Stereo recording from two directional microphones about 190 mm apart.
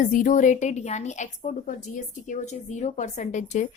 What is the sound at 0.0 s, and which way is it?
Speech, 45° left (ahead or behind).